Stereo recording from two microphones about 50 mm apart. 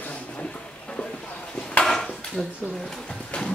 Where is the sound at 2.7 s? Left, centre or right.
Centre.